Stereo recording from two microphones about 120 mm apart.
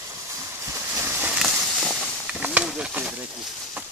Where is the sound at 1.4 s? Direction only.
5° right (ahead or behind).